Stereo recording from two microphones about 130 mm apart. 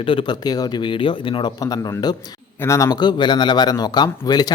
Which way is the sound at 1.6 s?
30° left (ahead or behind).